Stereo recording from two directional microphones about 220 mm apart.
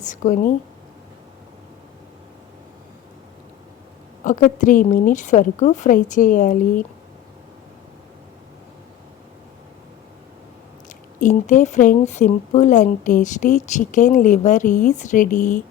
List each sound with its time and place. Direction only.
0.0 s speech: 35° left (ahead or behind)
4.2 s speech: 35° left (ahead or behind)
10.8 s speech: 35° left (ahead or behind)